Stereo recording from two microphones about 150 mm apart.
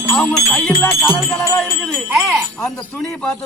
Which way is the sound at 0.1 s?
10° left (ahead or behind).